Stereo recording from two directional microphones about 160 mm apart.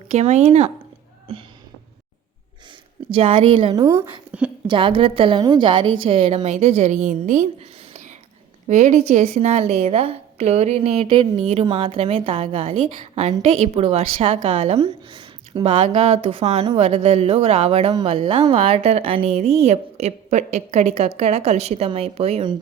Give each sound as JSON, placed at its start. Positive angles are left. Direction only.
{"t": 0.1, "sound": "speech", "side_deg": -45}
{"t": 3.1, "sound": "a woman's voice", "side_deg": -35}
{"t": 3.8, "sound": "speech", "side_deg": -20}
{"t": 4.3, "sound": "a sound", "side_deg": -5}
{"t": 4.6, "sound": "a woman's voice", "side_deg": -30}
{"t": 8.6, "sound": "a woman's voice", "side_deg": -45}